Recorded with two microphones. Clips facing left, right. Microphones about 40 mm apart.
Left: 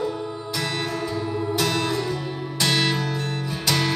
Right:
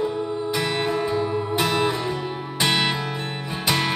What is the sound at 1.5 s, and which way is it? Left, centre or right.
Music, centre.